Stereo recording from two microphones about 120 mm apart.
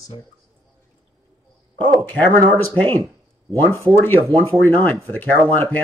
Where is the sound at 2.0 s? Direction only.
15° left (ahead or behind).